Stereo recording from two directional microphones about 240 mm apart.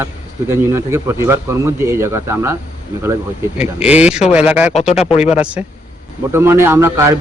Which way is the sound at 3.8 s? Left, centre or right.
Centre.